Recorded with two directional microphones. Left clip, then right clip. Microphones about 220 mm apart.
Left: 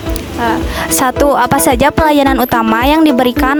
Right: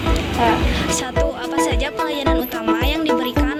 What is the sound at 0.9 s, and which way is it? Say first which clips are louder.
Speech: left 14 dB; 60° left (ahead or behind).